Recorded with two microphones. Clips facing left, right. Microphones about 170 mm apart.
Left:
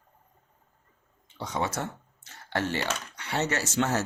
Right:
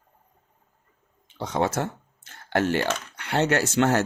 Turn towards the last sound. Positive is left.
turn(degrees=-65)  # may be behind; listen again after turning